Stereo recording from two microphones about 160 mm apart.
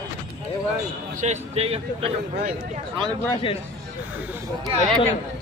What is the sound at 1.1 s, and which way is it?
A man's voice, 50° right (ahead or behind).